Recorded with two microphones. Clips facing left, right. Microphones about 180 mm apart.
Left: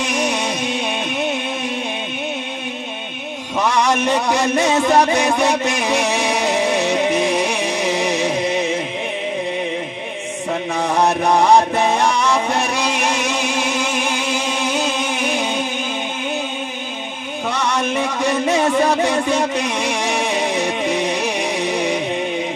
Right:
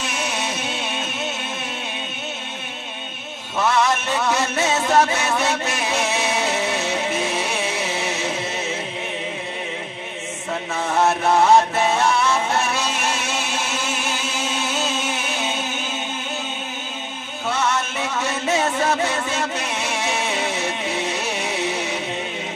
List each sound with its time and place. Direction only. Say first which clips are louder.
0.0 s music: left 6 dB; 15° left (ahead or behind)
3.5 s a sound: left 2 dB; 15° left (ahead or behind)
4.2 s music: left 4 dB; 15° left (ahead or behind)
10.7 s mantra: left 4 dB; 35° left (ahead or behind)
11.0 s chant: left 1 dB; 15° left (ahead or behind)
12.4 s music: left 3 dB; 15° left (ahead or behind)
15.3 s music: left 5 dB; 15° left (ahead or behind)
17.5 s music: left 2 dB; 15° left (ahead or behind)